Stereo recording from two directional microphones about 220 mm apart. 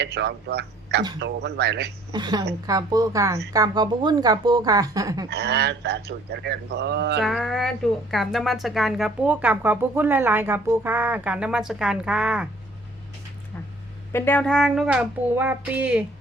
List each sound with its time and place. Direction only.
0.0 s a man's voice: 50° right (ahead or behind)
2.1 s a woman's voice: 20° right (ahead or behind)
5.3 s a man's voice: 50° right (ahead or behind)
7.2 s a woman's voice: centre (ahead or behind)
14.1 s a woman's voice: 10° left (ahead or behind); by 16.0 s 5° right (ahead or behind)